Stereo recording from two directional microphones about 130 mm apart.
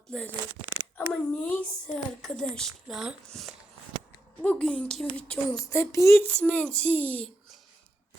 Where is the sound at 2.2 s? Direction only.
5° left (ahead or behind).